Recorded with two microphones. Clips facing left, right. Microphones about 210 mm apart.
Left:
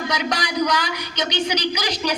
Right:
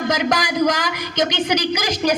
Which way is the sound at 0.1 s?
50° right (ahead or behind).